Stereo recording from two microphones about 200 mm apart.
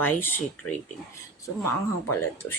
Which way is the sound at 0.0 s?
10° left (ahead or behind).